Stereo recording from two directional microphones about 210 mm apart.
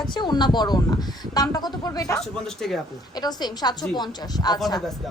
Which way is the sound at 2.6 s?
Centre (ahead or behind).